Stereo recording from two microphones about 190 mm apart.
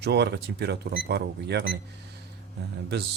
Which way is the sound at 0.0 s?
60° right (ahead or behind).